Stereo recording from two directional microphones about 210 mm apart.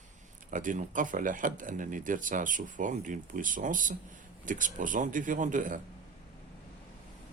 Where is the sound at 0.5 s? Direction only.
40° right (ahead or behind).